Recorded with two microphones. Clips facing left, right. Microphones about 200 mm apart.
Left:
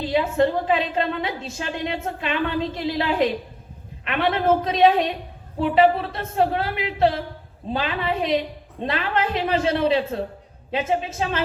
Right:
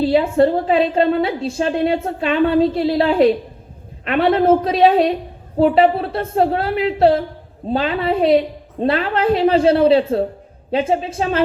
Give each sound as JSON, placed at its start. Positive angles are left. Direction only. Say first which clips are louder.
{"t": 0.0, "sound": "a woman's voice", "louder": "right 6 dB", "side_deg": -35}